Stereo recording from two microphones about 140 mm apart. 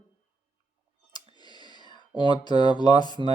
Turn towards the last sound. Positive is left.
turn(degrees=30)  # may be behind; listen again after turning